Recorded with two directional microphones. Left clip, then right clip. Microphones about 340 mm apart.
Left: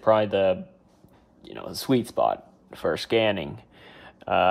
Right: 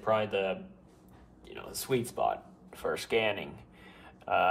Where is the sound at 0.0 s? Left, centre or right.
Left.